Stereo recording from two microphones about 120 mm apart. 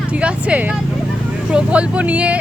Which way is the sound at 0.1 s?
10° right (ahead or behind).